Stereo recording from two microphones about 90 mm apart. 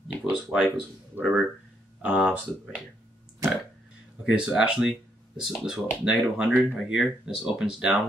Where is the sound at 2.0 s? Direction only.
10° right (ahead or behind).